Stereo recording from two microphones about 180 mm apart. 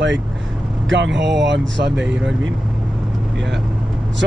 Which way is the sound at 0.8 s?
85° right.